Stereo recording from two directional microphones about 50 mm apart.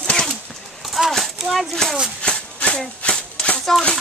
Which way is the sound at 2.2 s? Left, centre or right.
Left.